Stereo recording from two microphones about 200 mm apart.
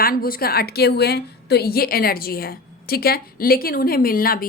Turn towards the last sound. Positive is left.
turn(degrees=45)  # may be behind; listen again after turning